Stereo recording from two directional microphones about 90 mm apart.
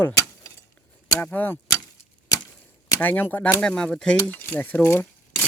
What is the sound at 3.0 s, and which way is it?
Speech, 20° left (ahead or behind).